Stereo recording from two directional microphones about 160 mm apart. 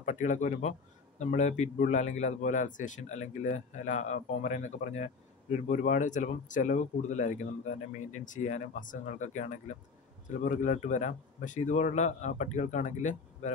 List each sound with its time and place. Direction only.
0.0 s a man's voice: 50° left (ahead or behind)